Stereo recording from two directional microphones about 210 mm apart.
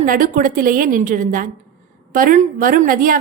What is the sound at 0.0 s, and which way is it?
A woman's voice, 40° right (ahead or behind).